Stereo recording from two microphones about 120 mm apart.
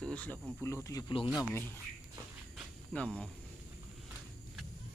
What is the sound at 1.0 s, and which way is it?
Speech, 40° left (ahead or behind).